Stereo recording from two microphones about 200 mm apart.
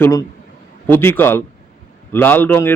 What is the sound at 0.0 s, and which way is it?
Speech, 15° left (ahead or behind).